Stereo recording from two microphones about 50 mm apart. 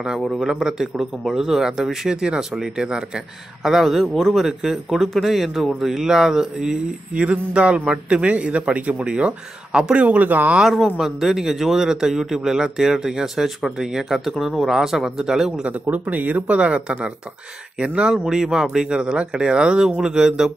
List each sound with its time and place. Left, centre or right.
0.3 s a man's voice: centre
3.6 s speech: centre; by 10.5 s right
11.1 s a man's voice: centre
15.6 s speech: right; by 20.5 s centre